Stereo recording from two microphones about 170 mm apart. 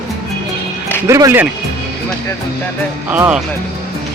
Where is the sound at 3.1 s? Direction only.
10° right (ahead or behind).